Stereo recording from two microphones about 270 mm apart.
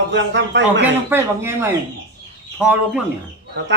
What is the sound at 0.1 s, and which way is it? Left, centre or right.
Speech, right.